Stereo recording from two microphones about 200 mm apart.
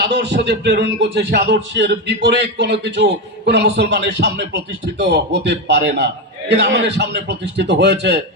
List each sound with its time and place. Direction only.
0.0 s speech: 60° right (ahead or behind)